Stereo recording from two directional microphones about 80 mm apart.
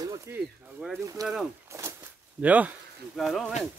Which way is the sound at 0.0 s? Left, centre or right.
Right.